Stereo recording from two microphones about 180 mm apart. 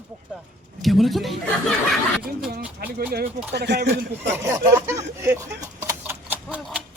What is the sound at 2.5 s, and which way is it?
Speech, 60° right (ahead or behind).